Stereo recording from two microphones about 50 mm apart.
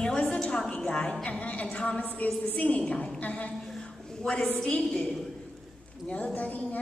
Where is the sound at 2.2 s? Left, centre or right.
Left.